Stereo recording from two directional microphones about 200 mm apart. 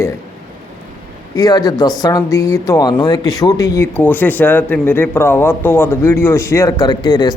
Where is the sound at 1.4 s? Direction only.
20° left (ahead or behind).